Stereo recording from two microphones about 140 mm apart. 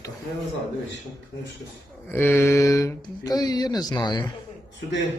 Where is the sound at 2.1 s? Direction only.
15° left (ahead or behind).